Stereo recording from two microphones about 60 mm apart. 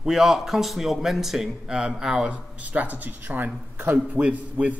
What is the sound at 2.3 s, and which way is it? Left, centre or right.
Speech, right.